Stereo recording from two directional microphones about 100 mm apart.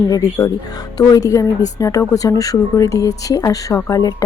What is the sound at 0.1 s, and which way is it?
A woman's voice, 35° left (ahead or behind).